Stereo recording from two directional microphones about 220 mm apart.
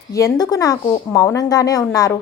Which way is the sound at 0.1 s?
15° left (ahead or behind).